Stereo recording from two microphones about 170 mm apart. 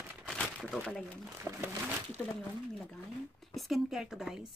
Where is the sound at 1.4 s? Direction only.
15° right (ahead or behind).